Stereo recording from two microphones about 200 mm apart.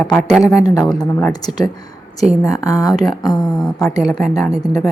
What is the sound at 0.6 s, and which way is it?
Speech, 20° left (ahead or behind).